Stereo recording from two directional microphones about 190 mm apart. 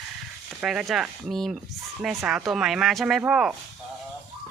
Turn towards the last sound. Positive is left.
turn(degrees=-5)  # may be behind; listen again after turning